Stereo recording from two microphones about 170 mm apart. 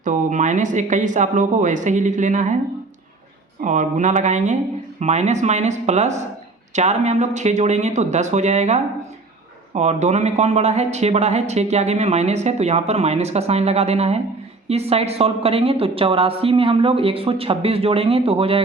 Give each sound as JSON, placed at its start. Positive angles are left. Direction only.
{"t": 0.0, "sound": "speech", "side_deg": -50}
{"t": 3.6, "sound": "speech", "side_deg": -45}